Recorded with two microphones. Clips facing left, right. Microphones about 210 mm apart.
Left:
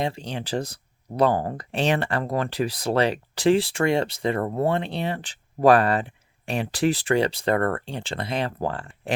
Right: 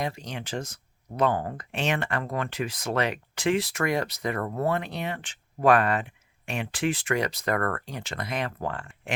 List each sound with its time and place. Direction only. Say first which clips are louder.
0.0 s speech: left 4 dB; 30° left (ahead or behind)